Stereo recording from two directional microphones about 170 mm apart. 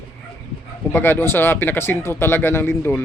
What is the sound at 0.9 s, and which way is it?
Speech, 15° left (ahead or behind).